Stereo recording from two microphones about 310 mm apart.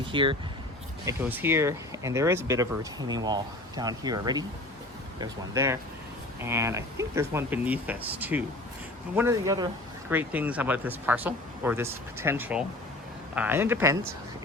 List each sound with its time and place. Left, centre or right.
0.1 s speech: centre